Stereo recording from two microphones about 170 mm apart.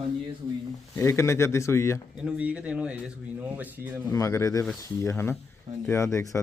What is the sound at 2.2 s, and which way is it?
Speech, 5° right (ahead or behind).